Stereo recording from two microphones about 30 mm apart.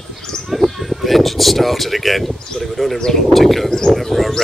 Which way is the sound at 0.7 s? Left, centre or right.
Centre.